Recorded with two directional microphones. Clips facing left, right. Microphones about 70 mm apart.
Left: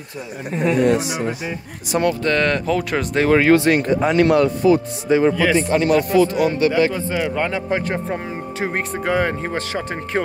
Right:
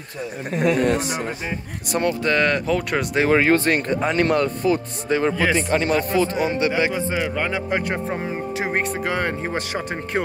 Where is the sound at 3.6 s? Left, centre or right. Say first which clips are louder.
Left 4 dB; right.